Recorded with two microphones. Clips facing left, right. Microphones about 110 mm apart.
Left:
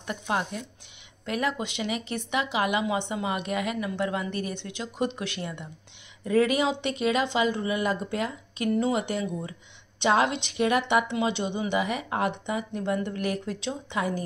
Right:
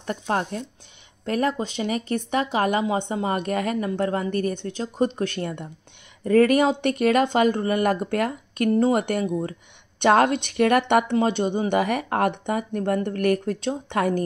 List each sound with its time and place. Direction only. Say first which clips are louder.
0.0 s speech: right 4 dB; 40° right (ahead or behind); by 11.1 s 60° right (ahead or behind)
11.1 s speech: right 6 dB; 50° right (ahead or behind)